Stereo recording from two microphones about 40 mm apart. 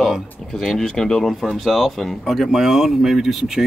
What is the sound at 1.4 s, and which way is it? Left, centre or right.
Speech, centre.